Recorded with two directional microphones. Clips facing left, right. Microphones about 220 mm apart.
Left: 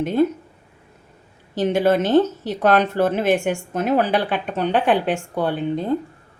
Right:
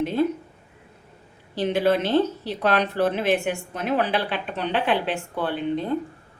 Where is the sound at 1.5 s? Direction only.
45° left (ahead or behind).